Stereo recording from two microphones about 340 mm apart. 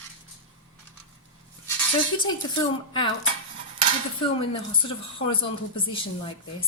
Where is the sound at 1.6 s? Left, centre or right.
Centre.